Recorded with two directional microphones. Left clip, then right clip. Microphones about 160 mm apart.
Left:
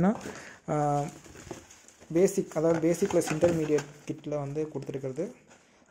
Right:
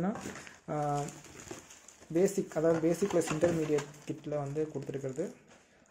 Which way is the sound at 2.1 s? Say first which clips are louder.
Left 4 dB; 30° left (ahead or behind).